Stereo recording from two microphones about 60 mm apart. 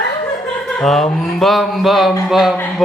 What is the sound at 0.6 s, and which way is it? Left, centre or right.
A woman's voice, centre.